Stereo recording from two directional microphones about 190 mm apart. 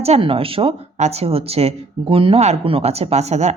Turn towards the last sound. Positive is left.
turn(degrees=-35)  # may be behind; listen again after turning